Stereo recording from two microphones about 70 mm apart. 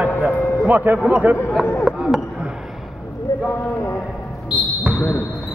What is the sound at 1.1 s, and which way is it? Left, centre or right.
Speech, right.